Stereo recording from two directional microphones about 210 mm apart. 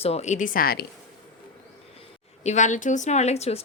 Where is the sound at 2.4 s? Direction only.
35° left (ahead or behind).